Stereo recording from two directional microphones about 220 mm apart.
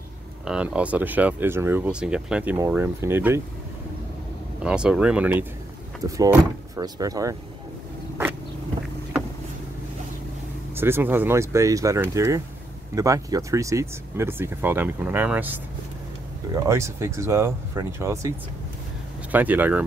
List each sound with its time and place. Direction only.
0.5 s speech: 5° right (ahead or behind)
4.6 s speech: 5° right (ahead or behind)
10.7 s speech: 10° right (ahead or behind)
19.3 s speech: 10° right (ahead or behind)